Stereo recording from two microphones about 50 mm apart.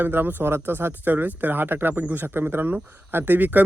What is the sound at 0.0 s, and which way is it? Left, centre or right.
Speech, right.